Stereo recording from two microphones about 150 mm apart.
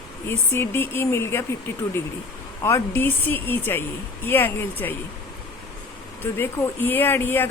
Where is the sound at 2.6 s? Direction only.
15° left (ahead or behind).